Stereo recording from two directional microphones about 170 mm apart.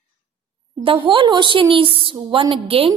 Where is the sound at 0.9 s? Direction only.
30° right (ahead or behind).